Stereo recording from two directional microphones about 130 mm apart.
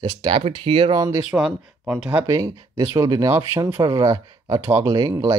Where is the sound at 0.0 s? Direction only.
40° right (ahead or behind).